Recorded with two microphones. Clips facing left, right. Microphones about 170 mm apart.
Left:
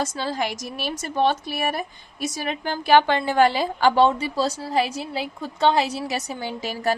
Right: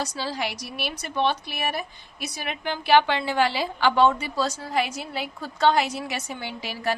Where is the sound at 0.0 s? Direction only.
50° left (ahead or behind).